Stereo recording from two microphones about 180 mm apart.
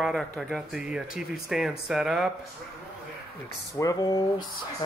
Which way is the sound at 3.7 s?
15° left (ahead or behind).